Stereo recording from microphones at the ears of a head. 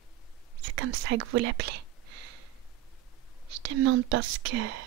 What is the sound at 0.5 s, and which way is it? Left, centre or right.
Whispering, right.